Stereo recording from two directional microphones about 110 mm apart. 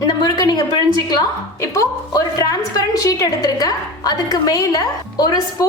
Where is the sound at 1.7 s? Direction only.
30° left (ahead or behind).